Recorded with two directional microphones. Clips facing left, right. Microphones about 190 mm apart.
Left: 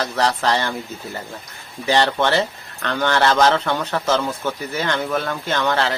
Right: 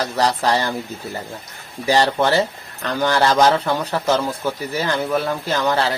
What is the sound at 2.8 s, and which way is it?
Speech, 10° right (ahead or behind).